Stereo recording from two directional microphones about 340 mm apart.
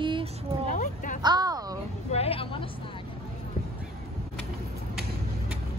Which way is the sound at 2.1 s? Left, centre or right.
Centre.